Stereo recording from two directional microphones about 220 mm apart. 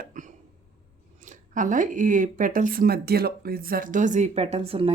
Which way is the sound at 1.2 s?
35° right (ahead or behind).